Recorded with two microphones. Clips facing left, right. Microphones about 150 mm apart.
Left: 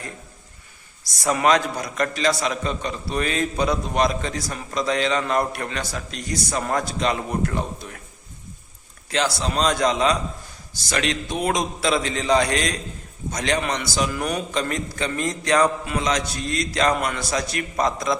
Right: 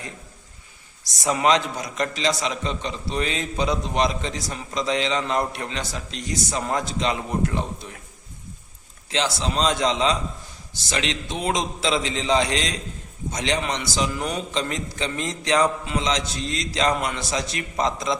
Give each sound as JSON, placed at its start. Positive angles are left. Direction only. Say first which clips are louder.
{"t": 1.0, "sound": "a man's voice", "louder": "left 1 dB", "side_deg": -20}
{"t": 9.1, "sound": "a man's voice", "louder": "left 1 dB", "side_deg": -20}
{"t": 11.3, "sound": "a man's voice", "louder": "left 1 dB", "side_deg": -20}